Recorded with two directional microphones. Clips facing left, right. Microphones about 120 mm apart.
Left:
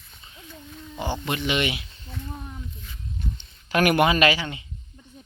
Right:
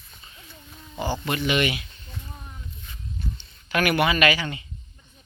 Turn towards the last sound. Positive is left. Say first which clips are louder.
# left 1 dB
turn(degrees=25)  # may be behind; listen again after turning